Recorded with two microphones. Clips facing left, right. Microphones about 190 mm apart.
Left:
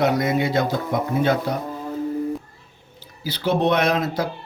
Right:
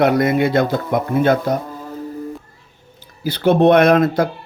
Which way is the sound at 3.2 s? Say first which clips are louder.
Right 8 dB; 55° right (ahead or behind).